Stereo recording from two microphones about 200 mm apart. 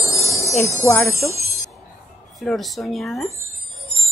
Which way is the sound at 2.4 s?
Centre (ahead or behind).